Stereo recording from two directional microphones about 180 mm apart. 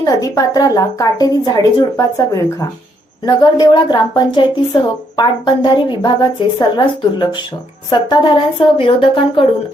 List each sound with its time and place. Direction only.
0.0 s a woman's voice: 20° left (ahead or behind)